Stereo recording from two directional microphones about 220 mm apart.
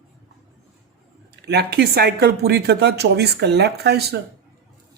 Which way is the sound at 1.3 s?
50° right (ahead or behind).